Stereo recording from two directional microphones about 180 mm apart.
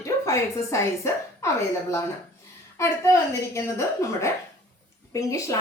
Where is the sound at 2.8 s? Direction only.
15° left (ahead or behind).